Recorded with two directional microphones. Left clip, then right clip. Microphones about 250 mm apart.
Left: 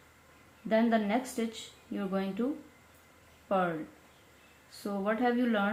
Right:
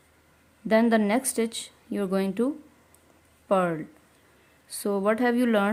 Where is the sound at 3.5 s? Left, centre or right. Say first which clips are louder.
Right 6 dB; right.